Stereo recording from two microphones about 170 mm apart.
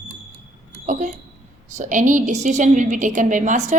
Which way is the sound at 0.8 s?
50° right (ahead or behind).